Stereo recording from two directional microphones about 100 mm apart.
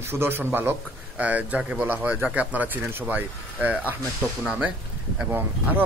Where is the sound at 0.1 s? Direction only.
25° right (ahead or behind).